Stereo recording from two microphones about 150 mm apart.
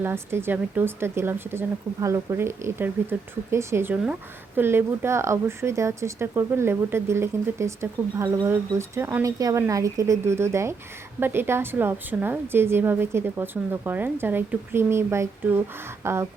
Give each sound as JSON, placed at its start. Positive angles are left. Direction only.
{"t": 0.0, "sound": "speech", "side_deg": -15}